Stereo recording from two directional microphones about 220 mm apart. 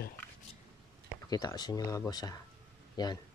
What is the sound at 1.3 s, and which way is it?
Speech, 15° left (ahead or behind).